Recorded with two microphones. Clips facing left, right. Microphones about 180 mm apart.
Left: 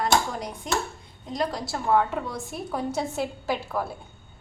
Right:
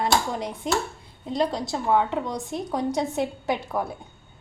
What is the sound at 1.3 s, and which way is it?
Speech, 25° right (ahead or behind).